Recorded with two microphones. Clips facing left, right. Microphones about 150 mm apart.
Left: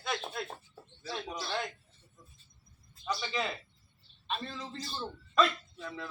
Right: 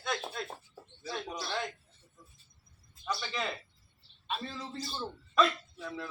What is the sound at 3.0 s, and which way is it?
A man's voice, centre (ahead or behind).